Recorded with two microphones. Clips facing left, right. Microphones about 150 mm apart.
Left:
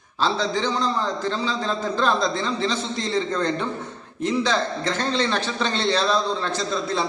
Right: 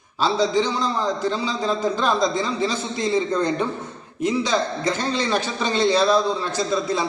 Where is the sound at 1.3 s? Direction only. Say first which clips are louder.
Right 2 dB; 10° right (ahead or behind).